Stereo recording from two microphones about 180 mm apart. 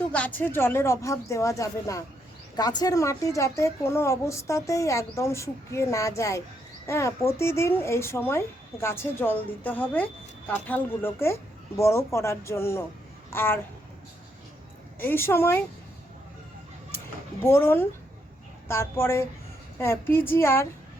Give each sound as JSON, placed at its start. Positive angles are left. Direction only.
{"t": 0.1, "sound": "a woman's voice", "side_deg": 10}
{"t": 14.9, "sound": "a woman's voice", "side_deg": 10}
{"t": 17.4, "sound": "a woman's voice", "side_deg": 15}